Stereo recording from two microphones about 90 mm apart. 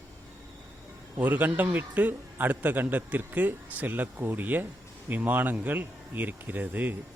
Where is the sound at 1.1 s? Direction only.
20° right (ahead or behind).